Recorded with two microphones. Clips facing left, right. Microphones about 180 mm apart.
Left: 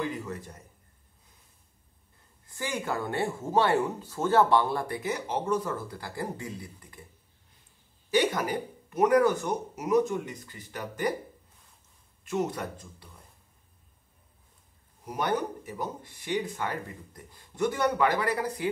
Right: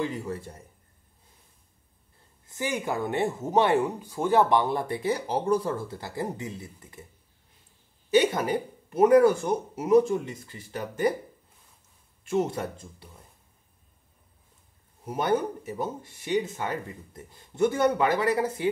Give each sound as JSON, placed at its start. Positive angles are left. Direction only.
{"t": 0.0, "sound": "speech", "side_deg": -30}
{"t": 2.4, "sound": "speech", "side_deg": -20}
{"t": 8.1, "sound": "speech", "side_deg": -25}
{"t": 12.3, "sound": "speech", "side_deg": -25}
{"t": 15.0, "sound": "speech", "side_deg": -25}